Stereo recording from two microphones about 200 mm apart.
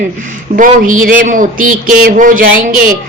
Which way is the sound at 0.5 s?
40° right (ahead or behind).